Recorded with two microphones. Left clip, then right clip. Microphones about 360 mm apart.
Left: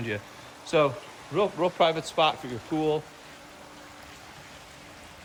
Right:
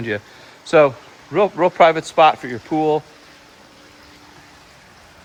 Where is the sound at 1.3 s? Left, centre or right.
Centre.